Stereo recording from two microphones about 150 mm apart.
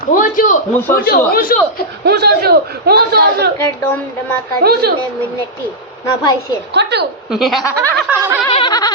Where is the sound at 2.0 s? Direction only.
90° right.